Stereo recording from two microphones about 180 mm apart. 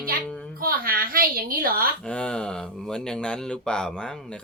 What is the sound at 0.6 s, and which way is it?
A woman's voice, 55° right (ahead or behind).